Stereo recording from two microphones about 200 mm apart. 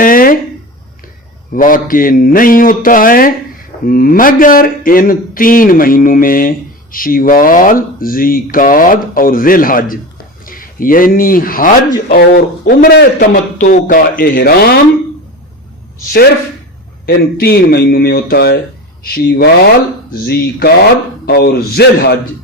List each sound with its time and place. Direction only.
0.0 s a sound: 45° left (ahead or behind)
1.5 s speech: 45° left (ahead or behind)
17.1 s speech: 50° left (ahead or behind)